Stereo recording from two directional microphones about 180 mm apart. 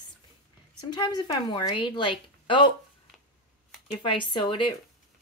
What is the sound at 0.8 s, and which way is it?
A woman's voice, 25° left (ahead or behind).